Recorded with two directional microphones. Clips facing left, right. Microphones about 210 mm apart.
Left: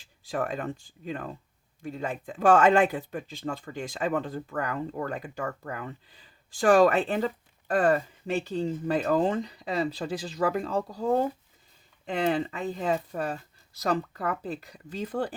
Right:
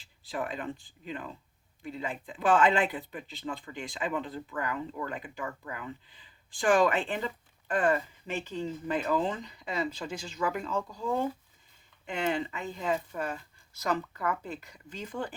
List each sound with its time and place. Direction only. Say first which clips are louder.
0.3 s speech: left 4 dB; 45° left (ahead or behind)